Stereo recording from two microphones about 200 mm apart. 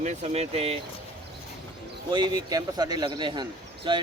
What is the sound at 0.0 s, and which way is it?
Speech, 35° right (ahead or behind).